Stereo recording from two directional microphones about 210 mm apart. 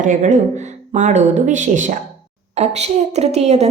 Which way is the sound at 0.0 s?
35° right (ahead or behind).